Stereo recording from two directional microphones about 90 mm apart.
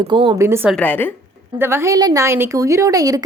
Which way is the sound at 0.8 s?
20° left (ahead or behind).